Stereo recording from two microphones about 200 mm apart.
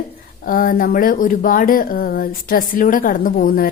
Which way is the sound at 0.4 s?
45° left (ahead or behind).